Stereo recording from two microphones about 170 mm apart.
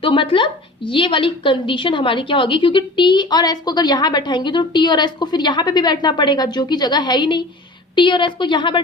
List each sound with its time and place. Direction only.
0.0 s a woman's voice: 30° left (ahead or behind)